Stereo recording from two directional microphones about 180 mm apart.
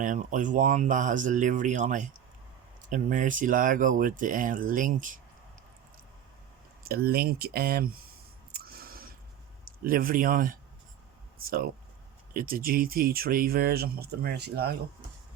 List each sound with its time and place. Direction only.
0.0 s speech: 45° right (ahead or behind)
6.8 s speech: 60° right (ahead or behind)
8.5 s a sound: 55° right (ahead or behind)
9.8 s speech: 55° right (ahead or behind)